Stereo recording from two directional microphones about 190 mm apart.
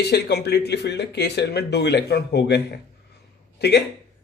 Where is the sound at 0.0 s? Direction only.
60° left (ahead or behind).